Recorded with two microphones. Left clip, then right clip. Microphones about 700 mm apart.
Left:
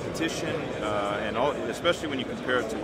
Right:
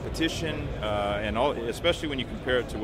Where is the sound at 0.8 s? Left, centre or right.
Right.